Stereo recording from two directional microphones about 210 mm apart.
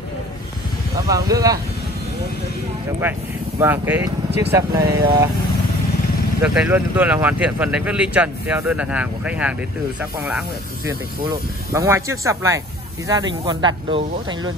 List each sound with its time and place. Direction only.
1.0 s speech: 15° right (ahead or behind)
3.0 s speech: 10° right (ahead or behind)
6.4 s speech: 5° right (ahead or behind)
10.9 s speech: 15° right (ahead or behind)